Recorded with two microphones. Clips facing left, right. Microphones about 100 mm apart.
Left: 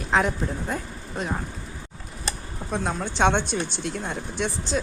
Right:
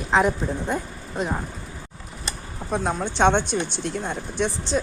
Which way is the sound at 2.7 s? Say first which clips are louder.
Right 3 dB; centre (ahead or behind).